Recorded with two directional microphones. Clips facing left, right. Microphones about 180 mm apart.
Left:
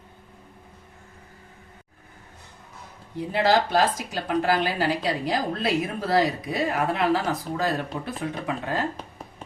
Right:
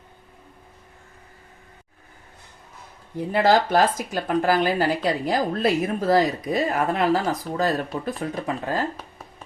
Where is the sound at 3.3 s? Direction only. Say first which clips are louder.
Right 3 dB; 50° right (ahead or behind).